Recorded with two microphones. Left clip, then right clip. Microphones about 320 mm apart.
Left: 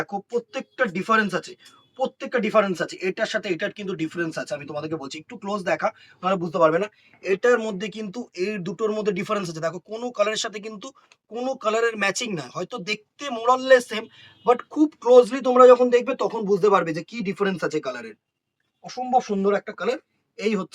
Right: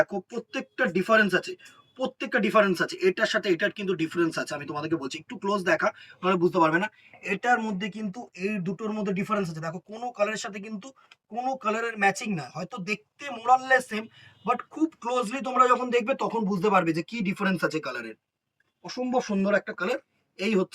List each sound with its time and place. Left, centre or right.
0.1 s speech: centre